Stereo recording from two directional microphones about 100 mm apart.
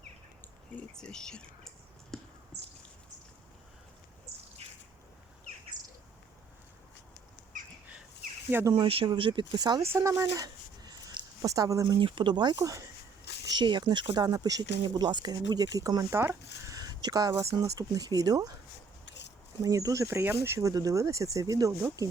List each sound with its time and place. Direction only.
0.8 s computer keyboard: 10° left (ahead or behind)
4.6 s bird: 90° right
8.7 s speech: 65° right (ahead or behind); by 9.8 s 45° right (ahead or behind)
9.9 s a sound: 30° right (ahead or behind)
11.4 s speech: 35° right (ahead or behind)
11.9 s speech: 55° right (ahead or behind)
12.5 s speech: 35° right (ahead or behind)
13.5 s speech: 45° right (ahead or behind); by 16.7 s 25° right (ahead or behind)
16.7 s speech: 40° right (ahead or behind)
19.6 s speech: 35° right (ahead or behind)